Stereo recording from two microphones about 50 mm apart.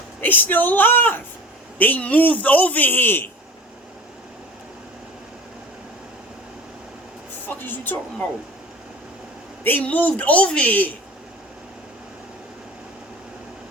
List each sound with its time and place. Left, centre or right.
0.2 s a man's voice: left
1.8 s a man's voice: left
7.4 s a sound: left
9.8 s a man's voice: left